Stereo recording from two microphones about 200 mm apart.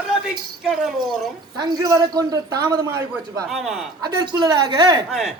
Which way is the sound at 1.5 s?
20° right (ahead or behind).